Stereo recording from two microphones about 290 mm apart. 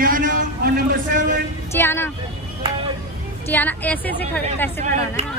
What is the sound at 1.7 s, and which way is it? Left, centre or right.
Speech, centre.